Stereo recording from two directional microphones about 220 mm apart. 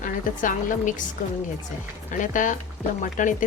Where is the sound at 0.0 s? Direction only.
35° left (ahead or behind).